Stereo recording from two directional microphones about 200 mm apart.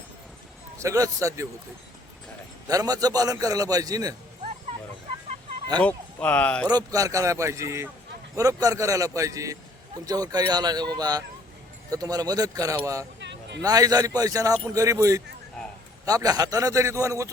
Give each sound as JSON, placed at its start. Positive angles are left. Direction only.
{"t": 0.8, "sound": "a man's voice", "side_deg": -15}
{"t": 2.6, "sound": "a man's voice", "side_deg": -20}
{"t": 5.8, "sound": "speech", "side_deg": 5}
{"t": 6.7, "sound": "a man's voice", "side_deg": -20}
{"t": 13.1, "sound": "a sound", "side_deg": -60}
{"t": 13.6, "sound": "a man's voice", "side_deg": -20}